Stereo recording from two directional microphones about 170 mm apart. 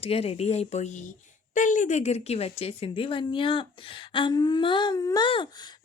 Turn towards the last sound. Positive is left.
turn(degrees=25)  # may be behind; listen again after turning